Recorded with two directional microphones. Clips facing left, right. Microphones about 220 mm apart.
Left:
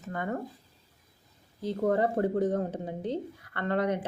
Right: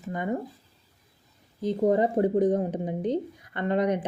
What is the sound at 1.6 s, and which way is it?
Speech, 20° right (ahead or behind).